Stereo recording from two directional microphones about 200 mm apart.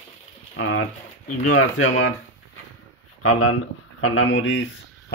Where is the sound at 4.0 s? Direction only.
80° left.